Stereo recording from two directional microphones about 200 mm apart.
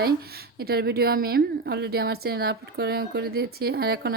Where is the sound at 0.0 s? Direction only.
50° right (ahead or behind).